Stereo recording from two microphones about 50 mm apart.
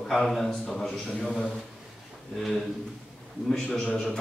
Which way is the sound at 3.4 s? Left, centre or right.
Centre.